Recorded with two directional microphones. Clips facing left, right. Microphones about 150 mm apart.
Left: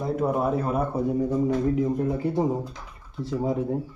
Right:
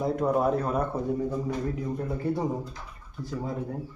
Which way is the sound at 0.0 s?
5° left (ahead or behind).